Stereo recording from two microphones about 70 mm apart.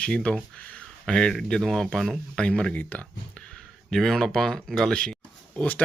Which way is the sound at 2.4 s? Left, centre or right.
Centre.